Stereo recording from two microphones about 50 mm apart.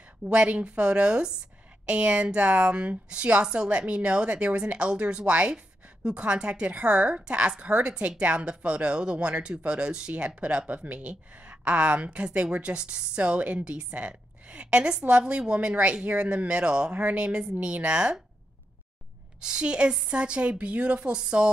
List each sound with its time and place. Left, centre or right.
0.2 s speech: right
19.4 s speech: centre